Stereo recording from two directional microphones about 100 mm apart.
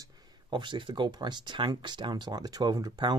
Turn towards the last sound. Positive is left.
turn(degrees=-45)  # may be behind; listen again after turning